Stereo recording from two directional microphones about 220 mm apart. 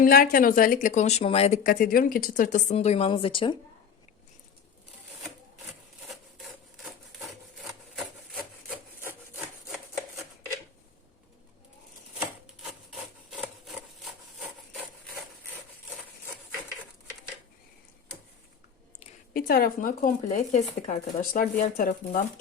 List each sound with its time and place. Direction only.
0.0 s a woman's voice: 40° left (ahead or behind); by 3.6 s 25° left (ahead or behind)
6.1 s rub: centre (ahead or behind)
12.9 s rub: centre (ahead or behind)
18.9 s a woman's voice: 40° left (ahead or behind)